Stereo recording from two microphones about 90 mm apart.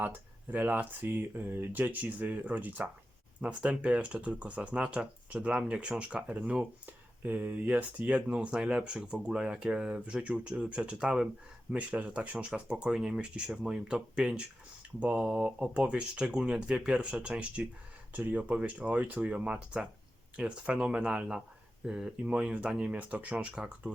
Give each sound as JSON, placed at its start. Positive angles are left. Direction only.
{"t": 0.0, "sound": "speech", "side_deg": -20}